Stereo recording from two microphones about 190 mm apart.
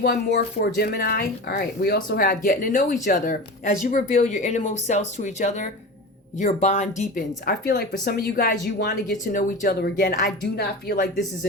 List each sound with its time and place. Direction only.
0.0 s speech: 60° left (ahead or behind); by 7.5 s 40° left (ahead or behind)
8.0 s speech: 55° left (ahead or behind)